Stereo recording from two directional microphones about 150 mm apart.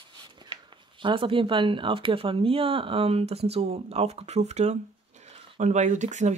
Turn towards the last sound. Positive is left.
turn(degrees=-55)  # may be behind; listen again after turning